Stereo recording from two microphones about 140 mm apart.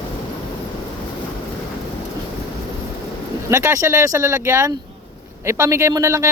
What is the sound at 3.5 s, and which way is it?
Speech, 20° right (ahead or behind).